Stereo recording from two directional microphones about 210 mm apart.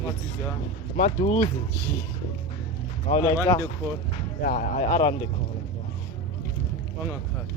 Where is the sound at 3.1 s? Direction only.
15° left (ahead or behind).